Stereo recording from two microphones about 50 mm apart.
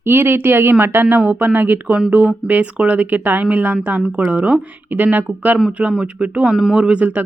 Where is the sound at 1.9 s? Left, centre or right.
Right.